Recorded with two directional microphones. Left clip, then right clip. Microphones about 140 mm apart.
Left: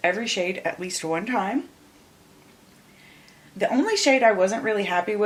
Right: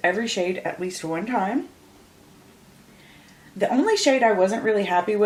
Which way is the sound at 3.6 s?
25° left (ahead or behind).